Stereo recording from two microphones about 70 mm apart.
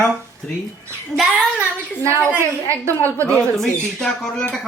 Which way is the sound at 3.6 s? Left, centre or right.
Centre.